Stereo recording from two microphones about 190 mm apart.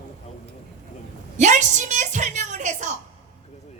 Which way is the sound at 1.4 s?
40° right (ahead or behind).